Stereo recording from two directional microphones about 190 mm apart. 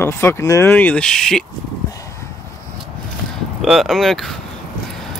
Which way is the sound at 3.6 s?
Centre (ahead or behind).